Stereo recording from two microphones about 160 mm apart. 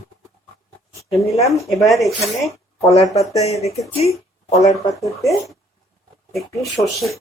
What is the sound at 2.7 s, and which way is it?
Speech, 20° left (ahead or behind).